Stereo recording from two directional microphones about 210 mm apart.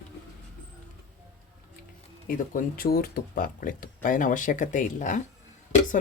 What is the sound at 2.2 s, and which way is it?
Speech, 40° left (ahead or behind).